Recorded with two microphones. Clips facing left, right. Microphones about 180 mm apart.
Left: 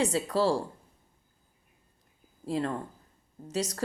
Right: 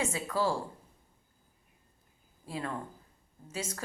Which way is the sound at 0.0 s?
35° left (ahead or behind).